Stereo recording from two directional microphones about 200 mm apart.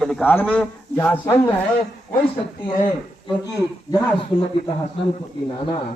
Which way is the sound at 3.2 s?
20° left (ahead or behind).